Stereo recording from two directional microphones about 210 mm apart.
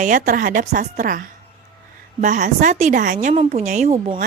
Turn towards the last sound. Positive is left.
turn(degrees=-30)  # may be behind; listen again after turning